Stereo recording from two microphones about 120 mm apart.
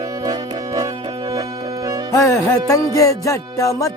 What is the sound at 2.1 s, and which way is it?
Music, 25° left (ahead or behind).